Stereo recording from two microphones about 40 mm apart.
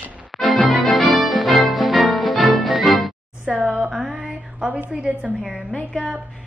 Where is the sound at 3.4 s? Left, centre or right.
Right.